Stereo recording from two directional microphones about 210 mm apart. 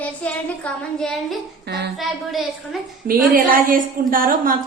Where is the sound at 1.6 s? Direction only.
50° right (ahead or behind).